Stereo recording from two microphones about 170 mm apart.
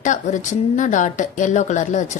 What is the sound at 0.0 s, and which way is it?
A woman's voice, 45° left (ahead or behind).